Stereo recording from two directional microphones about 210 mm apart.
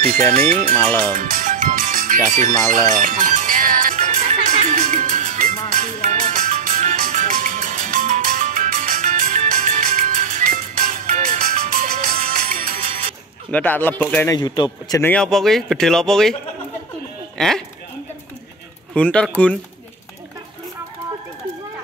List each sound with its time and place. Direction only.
0.0 s speech: 45° right (ahead or behind)
0.7 s speech: 5° left (ahead or behind)
1.1 s music: 40° right (ahead or behind)
13.5 s speech: 10° left (ahead or behind)
14.3 s speech: 20° left (ahead or behind); by 16.3 s centre (ahead or behind)
17.4 s speech: centre (ahead or behind)
18.9 s speech: 5° left (ahead or behind)